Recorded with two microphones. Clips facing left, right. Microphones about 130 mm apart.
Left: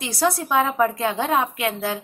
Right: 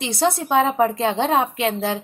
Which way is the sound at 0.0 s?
25° right (ahead or behind).